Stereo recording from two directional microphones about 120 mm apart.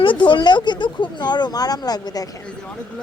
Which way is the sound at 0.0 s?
45° left (ahead or behind).